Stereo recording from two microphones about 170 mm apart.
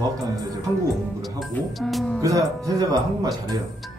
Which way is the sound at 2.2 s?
20° right (ahead or behind).